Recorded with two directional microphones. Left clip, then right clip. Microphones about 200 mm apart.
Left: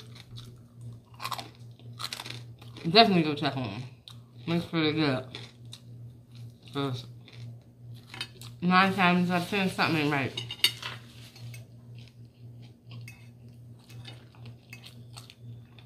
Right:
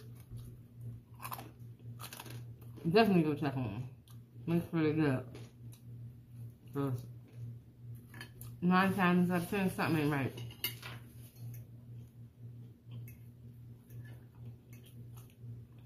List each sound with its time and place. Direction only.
1.1 s chewing: 5° left (ahead or behind)
2.0 s crunch: 5° left (ahead or behind)
4.5 s speech: 5° left (ahead or behind)
8.5 s speech: 5° left (ahead or behind)